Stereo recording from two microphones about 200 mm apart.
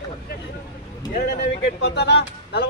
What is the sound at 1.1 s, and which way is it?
A man's voice, 50° left (ahead or behind).